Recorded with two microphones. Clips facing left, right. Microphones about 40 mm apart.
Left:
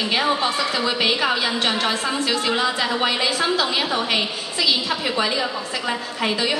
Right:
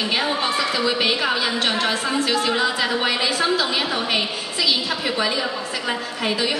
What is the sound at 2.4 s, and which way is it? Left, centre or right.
Speech, centre.